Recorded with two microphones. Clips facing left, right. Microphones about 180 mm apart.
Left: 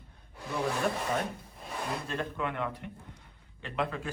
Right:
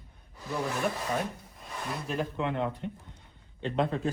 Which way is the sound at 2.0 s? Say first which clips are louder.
Right 3 dB; 20° right (ahead or behind).